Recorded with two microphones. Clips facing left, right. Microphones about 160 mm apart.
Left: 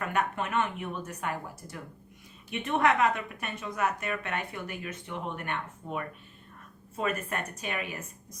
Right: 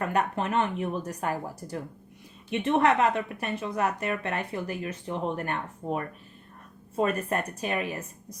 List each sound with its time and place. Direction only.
0.0 s speech: 35° right (ahead or behind)